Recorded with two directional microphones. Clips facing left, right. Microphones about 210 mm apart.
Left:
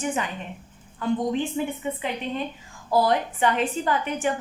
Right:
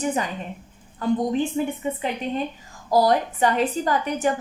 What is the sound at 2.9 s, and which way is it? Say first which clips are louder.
A woman's voice: right 3 dB; 40° right (ahead or behind).